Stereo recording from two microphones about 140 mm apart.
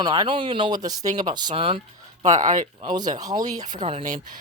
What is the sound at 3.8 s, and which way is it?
Speech, 50° right (ahead or behind).